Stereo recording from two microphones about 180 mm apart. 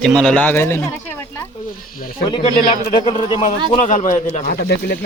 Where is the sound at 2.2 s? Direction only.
25° left (ahead or behind).